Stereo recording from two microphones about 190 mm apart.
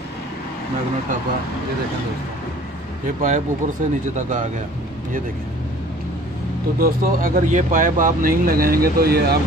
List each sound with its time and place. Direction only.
3.2 s speech: 40° right (ahead or behind)
6.8 s speech: 50° right (ahead or behind)